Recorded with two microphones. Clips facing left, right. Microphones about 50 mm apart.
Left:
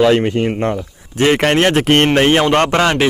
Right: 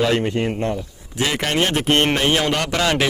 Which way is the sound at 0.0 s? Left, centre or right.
Left.